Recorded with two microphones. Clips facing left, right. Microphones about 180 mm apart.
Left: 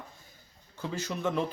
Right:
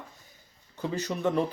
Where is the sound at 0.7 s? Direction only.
15° right (ahead or behind).